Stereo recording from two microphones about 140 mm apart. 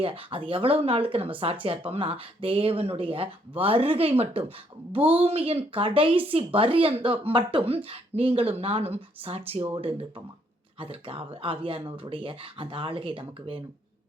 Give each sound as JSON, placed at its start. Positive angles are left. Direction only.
{"t": 0.0, "sound": "speech", "side_deg": -40}